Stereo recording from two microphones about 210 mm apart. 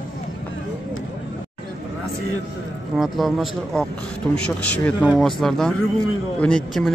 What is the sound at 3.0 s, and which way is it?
A man's voice, centre (ahead or behind).